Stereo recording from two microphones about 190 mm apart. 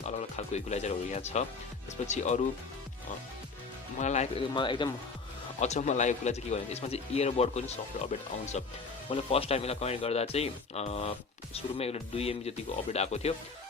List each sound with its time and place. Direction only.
0.0 s a man's voice: 35° left (ahead or behind)
3.9 s speech: 40° left (ahead or behind)
5.5 s a man's voice: 35° left (ahead or behind)
9.0 s a man's voice: 30° left (ahead or behind)